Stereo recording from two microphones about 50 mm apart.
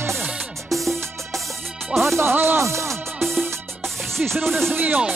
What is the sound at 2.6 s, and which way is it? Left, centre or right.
Speech, right.